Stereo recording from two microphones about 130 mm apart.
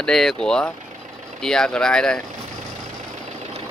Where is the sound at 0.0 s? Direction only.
5° left (ahead or behind).